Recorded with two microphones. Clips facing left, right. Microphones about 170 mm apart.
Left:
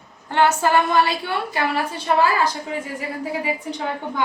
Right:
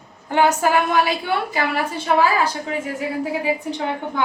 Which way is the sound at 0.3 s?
15° right (ahead or behind).